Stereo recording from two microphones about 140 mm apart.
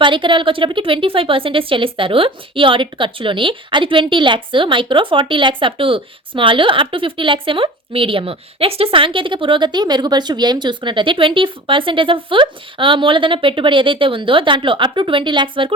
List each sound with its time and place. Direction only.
0.0 s a woman's voice: 35° right (ahead or behind)